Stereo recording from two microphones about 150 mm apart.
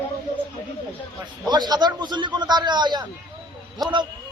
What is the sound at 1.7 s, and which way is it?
A man's voice, 30° right (ahead or behind).